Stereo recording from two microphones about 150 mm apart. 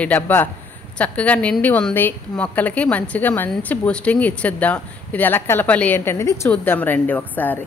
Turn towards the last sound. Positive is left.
turn(degrees=10)  # may be behind; listen again after turning